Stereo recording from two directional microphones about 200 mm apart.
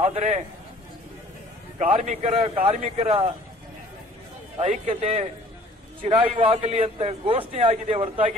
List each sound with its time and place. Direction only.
0.0 s a man's voice: 35° right (ahead or behind)
1.8 s a man's voice: 35° right (ahead or behind)
4.6 s a man's voice: 30° right (ahead or behind)
6.3 s a man's voice: 30° right (ahead or behind)